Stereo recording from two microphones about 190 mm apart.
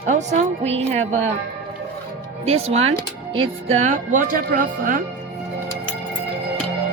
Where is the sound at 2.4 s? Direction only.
35° right (ahead or behind).